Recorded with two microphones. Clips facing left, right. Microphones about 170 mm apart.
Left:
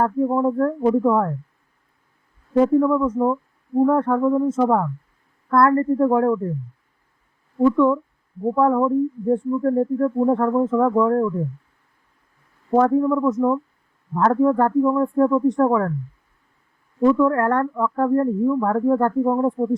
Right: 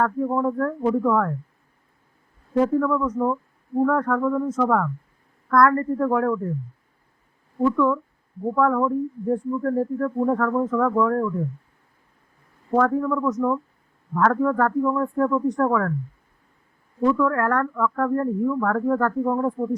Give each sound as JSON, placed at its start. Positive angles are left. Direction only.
{"t": 0.3, "sound": "speech", "side_deg": 20}
{"t": 2.7, "sound": "speech", "side_deg": 25}
{"t": 7.6, "sound": "speech", "side_deg": 25}
{"t": 12.7, "sound": "speech", "side_deg": 25}
{"t": 17.0, "sound": "speech", "side_deg": 25}